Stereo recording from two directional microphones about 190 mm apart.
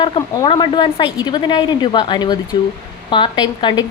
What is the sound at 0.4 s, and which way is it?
A woman's voice, 25° left (ahead or behind).